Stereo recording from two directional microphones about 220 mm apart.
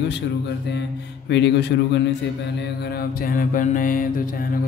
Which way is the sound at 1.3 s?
50° left (ahead or behind).